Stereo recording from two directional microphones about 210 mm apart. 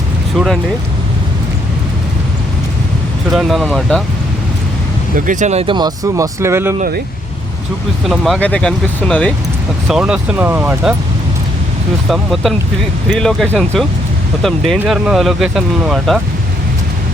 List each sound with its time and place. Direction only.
0.3 s speech: centre (ahead or behind)
3.2 s speech: centre (ahead or behind)
5.1 s speech: 40° right (ahead or behind); by 6.7 s 10° right (ahead or behind)
6.7 s speech: 45° right (ahead or behind)
8.0 s speech: centre (ahead or behind)
9.9 s speech: 5° right (ahead or behind)
12.0 s speech: centre (ahead or behind)